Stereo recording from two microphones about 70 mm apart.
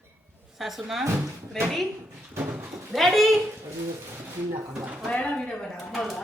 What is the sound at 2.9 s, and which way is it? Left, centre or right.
Speech, centre.